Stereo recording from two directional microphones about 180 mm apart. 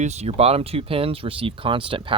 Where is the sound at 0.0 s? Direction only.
40° right (ahead or behind).